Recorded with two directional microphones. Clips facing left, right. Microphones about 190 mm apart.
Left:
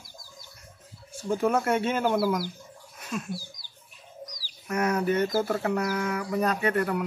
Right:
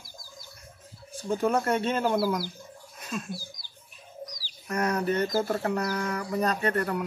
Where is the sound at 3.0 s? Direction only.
5° left (ahead or behind).